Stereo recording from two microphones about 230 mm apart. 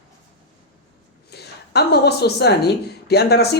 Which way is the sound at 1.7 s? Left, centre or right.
Left.